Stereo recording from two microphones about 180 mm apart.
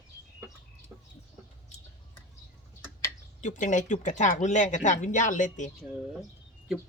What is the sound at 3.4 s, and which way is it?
Speech, 45° left (ahead or behind).